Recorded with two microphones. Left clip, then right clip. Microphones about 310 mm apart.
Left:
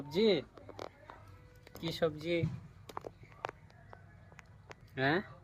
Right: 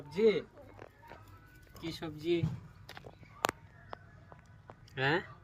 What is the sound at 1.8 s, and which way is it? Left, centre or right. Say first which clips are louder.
Speech: left 6 dB; centre.